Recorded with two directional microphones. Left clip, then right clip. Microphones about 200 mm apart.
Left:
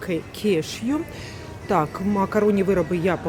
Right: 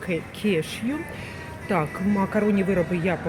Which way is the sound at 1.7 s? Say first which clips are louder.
Left 3 dB; 20° left (ahead or behind).